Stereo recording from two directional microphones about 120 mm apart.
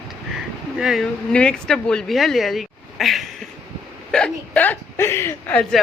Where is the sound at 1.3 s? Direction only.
10° left (ahead or behind).